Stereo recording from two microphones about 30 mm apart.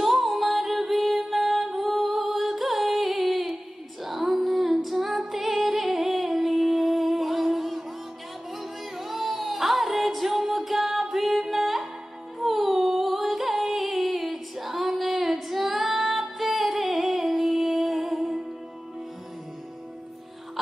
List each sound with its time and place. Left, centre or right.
0.0 s music: centre
4.0 s female singing: centre
8.9 s music: centre
15.0 s female singing: centre
16.7 s music: centre